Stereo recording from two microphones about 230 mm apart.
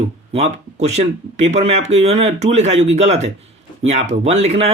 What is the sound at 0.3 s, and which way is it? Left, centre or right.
Speech, right.